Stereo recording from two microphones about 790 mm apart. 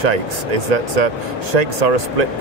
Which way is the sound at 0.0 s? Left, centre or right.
Right.